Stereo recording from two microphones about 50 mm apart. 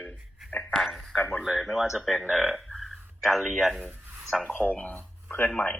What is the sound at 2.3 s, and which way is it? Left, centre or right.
Burping, centre.